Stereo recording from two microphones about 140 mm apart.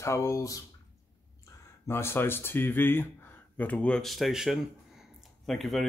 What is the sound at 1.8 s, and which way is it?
Speech, 15° left (ahead or behind).